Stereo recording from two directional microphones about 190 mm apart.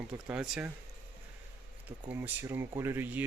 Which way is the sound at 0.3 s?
5° right (ahead or behind).